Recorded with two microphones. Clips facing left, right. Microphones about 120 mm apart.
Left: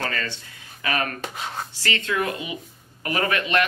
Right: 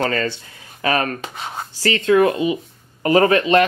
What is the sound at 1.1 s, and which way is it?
Speech, centre (ahead or behind).